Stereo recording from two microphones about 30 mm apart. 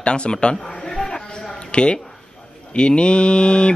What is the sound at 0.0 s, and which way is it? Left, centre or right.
Speech, left.